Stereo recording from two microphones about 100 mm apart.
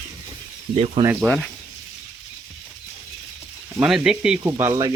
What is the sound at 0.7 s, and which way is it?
Speech, 90° right.